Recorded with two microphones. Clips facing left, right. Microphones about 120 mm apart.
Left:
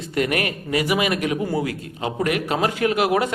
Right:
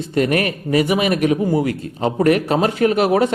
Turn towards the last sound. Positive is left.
turn(degrees=-35)  # may be behind; listen again after turning